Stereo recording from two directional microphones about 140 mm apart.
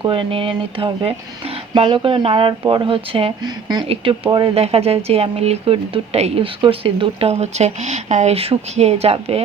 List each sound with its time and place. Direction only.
0.0 s speech: 40° right (ahead or behind)
3.4 s speech: 30° right (ahead or behind)
3.8 s speech: 40° right (ahead or behind)